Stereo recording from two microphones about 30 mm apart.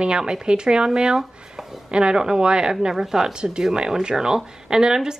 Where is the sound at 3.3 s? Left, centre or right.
Right.